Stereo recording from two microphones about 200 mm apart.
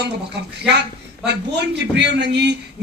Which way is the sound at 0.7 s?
60° right (ahead or behind).